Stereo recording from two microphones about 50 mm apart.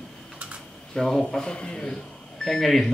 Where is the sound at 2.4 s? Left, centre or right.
Centre.